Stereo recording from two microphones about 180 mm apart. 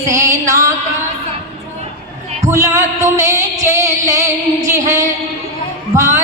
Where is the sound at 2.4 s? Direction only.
15° right (ahead or behind).